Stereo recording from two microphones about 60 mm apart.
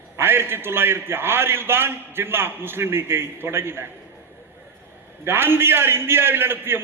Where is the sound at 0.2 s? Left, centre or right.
Right.